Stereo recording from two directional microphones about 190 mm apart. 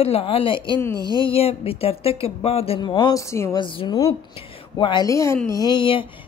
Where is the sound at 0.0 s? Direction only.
30° left (ahead or behind).